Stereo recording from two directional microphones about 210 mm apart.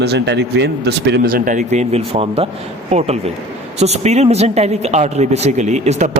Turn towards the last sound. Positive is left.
turn(degrees=-30)  # may be behind; listen again after turning